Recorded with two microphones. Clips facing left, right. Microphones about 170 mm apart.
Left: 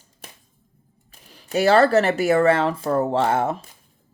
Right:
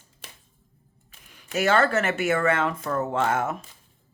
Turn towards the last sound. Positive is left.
turn(degrees=30)  # may be behind; listen again after turning